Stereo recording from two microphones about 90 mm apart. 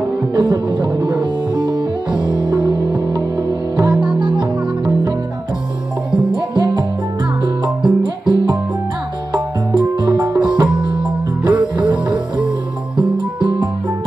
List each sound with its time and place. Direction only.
0.4 s music: 60° right (ahead or behind)
6.3 s music: 60° right (ahead or behind)
9.8 s music: 60° right (ahead or behind)